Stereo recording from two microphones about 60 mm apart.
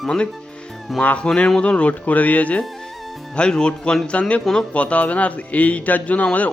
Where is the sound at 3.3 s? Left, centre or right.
Centre.